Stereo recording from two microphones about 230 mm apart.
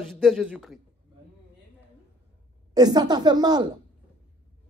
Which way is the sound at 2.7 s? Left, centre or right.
Centre.